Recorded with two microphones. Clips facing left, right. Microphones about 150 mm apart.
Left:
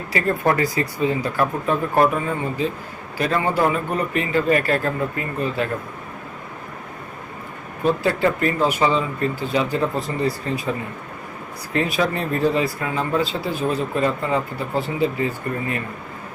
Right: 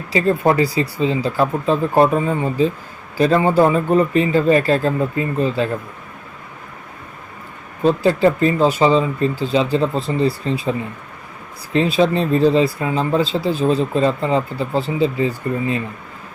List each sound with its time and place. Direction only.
0.1 s speech: 25° right (ahead or behind)
7.9 s speech: 30° right (ahead or behind)